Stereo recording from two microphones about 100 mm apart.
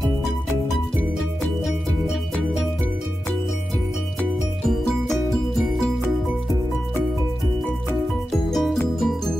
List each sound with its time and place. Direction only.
4.6 s music: 5° left (ahead or behind)
8.3 s music: centre (ahead or behind)